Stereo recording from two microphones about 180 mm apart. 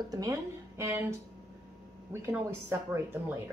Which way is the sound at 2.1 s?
15° right (ahead or behind).